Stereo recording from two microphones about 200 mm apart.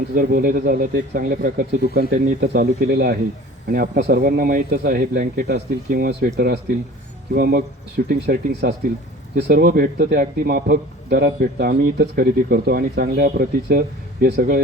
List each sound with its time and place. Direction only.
0.2 s a man's voice: 45° right (ahead or behind)